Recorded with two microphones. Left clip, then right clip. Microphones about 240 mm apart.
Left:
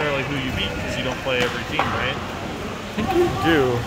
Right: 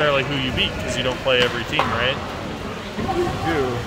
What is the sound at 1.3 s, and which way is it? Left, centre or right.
Speech, right.